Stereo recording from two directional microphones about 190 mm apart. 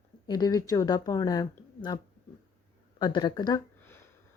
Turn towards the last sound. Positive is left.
turn(degrees=20)  # may be behind; listen again after turning